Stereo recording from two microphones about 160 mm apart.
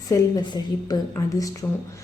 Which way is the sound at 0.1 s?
25° left (ahead or behind).